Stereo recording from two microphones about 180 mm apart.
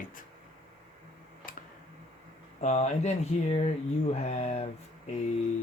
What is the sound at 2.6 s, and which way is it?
Speech, 40° left (ahead or behind).